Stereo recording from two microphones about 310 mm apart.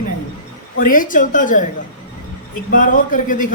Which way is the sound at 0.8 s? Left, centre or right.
Left.